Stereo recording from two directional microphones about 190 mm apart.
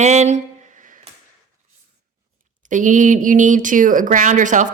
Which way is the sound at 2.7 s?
40° right (ahead or behind).